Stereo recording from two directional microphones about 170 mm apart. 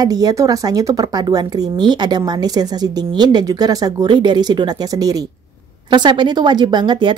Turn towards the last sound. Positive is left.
turn(degrees=-25)  # may be behind; listen again after turning